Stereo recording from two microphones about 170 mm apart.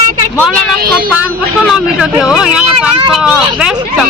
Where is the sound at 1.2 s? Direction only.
Centre (ahead or behind).